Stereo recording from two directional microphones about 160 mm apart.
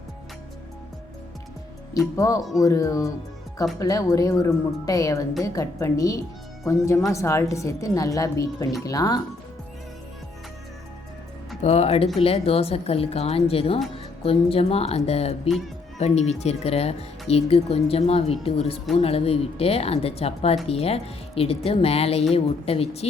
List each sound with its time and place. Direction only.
2.1 s a woman's voice: 20° left (ahead or behind)
11.6 s speech: 40° left (ahead or behind)